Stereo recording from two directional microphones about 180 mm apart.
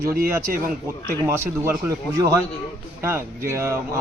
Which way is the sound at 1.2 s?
15° right (ahead or behind).